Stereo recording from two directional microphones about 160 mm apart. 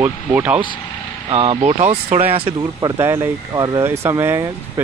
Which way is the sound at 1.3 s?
35° right (ahead or behind).